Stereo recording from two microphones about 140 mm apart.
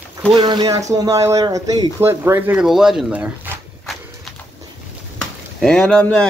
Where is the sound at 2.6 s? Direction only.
5° right (ahead or behind).